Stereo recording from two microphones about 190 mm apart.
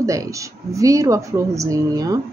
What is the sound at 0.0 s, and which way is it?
Speech, 15° right (ahead or behind).